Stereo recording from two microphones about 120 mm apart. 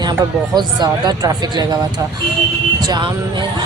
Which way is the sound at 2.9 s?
40° right (ahead or behind).